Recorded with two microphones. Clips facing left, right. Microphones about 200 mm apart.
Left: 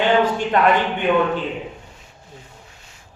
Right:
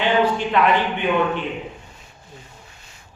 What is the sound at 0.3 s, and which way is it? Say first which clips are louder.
Speech: left 1 dB; 45° left (ahead or behind).